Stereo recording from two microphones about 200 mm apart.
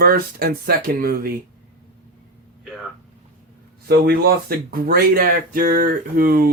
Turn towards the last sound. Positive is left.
turn(degrees=-50)  # may be behind; listen again after turning